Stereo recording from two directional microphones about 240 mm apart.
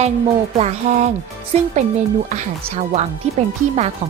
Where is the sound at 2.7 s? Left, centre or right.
Right.